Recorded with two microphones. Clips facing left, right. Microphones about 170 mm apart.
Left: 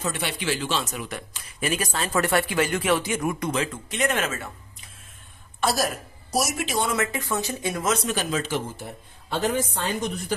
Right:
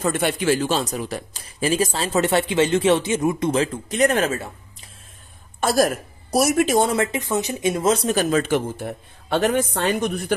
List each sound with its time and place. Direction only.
0.0 s speech: 50° right (ahead or behind)
5.6 s a woman's voice: 50° right (ahead or behind)
6.9 s speech: 25° right (ahead or behind)
8.2 s speech: 50° right (ahead or behind)